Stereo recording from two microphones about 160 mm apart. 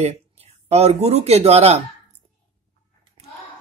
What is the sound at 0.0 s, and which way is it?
Speech, 40° right (ahead or behind).